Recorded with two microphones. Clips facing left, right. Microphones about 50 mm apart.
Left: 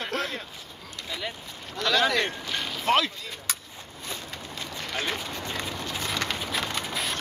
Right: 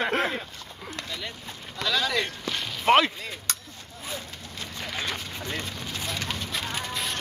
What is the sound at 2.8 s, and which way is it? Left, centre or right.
Speech, right.